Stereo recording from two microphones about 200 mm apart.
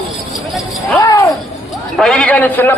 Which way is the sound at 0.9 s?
15° left (ahead or behind).